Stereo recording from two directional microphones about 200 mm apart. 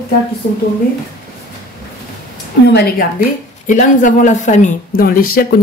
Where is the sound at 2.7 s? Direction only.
50° left (ahead or behind).